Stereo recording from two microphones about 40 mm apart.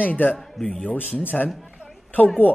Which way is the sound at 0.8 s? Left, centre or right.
Left.